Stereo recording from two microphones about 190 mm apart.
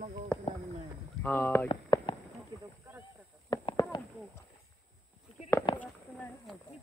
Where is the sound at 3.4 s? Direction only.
20° left (ahead or behind).